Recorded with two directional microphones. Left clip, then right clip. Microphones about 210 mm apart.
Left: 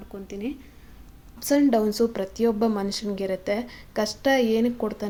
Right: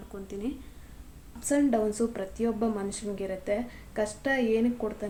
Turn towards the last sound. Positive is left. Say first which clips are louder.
# left 4 dB
turn(degrees=45)  # may be behind; listen again after turning